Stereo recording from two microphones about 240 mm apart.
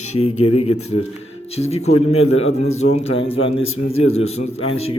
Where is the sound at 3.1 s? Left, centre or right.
Left.